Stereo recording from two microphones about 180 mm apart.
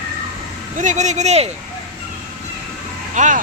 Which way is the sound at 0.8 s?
45° right (ahead or behind).